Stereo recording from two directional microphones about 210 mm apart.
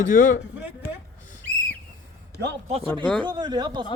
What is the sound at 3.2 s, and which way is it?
Speech, 20° right (ahead or behind).